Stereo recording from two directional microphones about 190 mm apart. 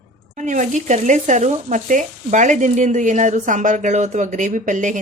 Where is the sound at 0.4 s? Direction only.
40° right (ahead or behind).